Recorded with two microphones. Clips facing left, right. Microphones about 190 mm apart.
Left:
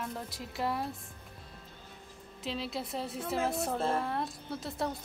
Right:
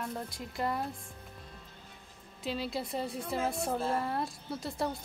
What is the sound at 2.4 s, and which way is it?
A woman's voice, centre (ahead or behind).